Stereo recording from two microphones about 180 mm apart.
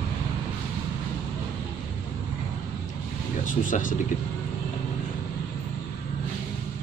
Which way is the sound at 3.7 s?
50° left (ahead or behind).